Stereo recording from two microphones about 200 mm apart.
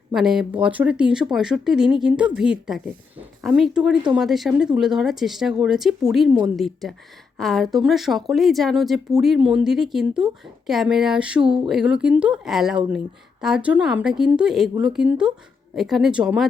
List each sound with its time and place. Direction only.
0.1 s speech: centre (ahead or behind)
7.3 s speech: centre (ahead or behind)
11.4 s speech: 25° right (ahead or behind)
11.7 s speech: 5° right (ahead or behind)